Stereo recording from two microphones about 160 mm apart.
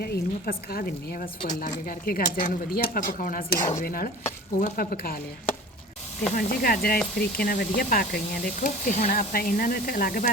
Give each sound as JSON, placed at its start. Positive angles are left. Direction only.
{"t": 0.0, "sound": "a woman's voice", "side_deg": 70}
{"t": 6.3, "sound": "a woman's voice", "side_deg": 65}